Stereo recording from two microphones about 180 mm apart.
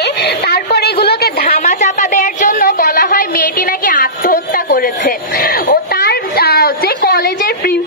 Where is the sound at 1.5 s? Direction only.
40° left (ahead or behind).